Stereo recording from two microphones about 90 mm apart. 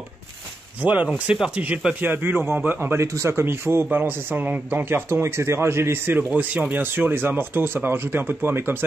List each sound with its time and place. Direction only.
0.8 s a man's voice: 15° right (ahead or behind)